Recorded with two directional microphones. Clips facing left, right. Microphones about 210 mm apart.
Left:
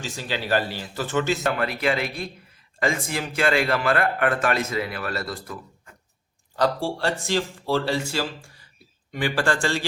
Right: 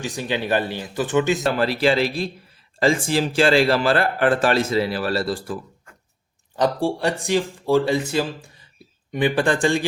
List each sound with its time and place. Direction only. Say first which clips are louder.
0.0 s speech: right 5 dB; 15° right (ahead or behind)
1.5 s a man's voice: right 5 dB; 30° right (ahead or behind)
6.6 s speech: right 3 dB; 15° right (ahead or behind)